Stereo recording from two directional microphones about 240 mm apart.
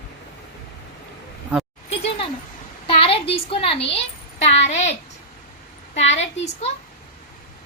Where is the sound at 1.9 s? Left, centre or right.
Left.